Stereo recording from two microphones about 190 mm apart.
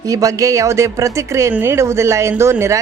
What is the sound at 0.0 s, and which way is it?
Speech, 15° right (ahead or behind).